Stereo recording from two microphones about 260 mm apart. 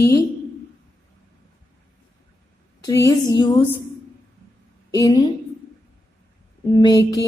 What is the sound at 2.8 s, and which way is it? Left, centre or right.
Speech, centre.